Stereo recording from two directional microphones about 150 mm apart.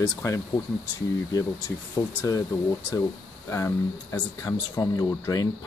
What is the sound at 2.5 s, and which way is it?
Speech, 15° left (ahead or behind).